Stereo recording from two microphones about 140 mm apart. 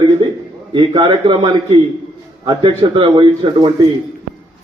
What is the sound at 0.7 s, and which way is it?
A man's voice, 40° right (ahead or behind).